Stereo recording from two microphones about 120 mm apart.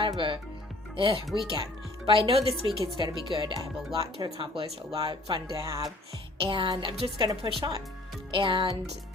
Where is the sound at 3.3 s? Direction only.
35° right (ahead or behind).